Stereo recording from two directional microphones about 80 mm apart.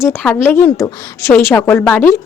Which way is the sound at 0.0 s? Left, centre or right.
Left.